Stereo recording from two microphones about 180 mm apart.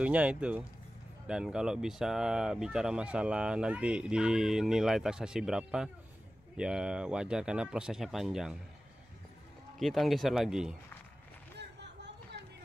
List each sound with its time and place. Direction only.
0.0 s speech: 5° right (ahead or behind)
9.8 s speech: centre (ahead or behind)
11.5 s a sound: 70° right (ahead or behind)